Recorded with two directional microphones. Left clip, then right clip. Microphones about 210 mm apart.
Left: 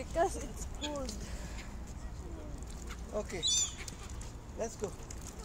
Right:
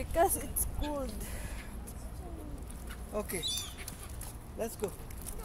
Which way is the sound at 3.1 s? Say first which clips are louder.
Right 1 dB; 55° right (ahead or behind).